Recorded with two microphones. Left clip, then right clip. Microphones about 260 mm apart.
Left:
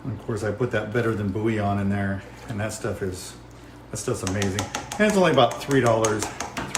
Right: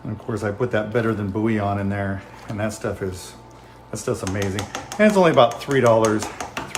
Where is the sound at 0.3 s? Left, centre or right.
Right.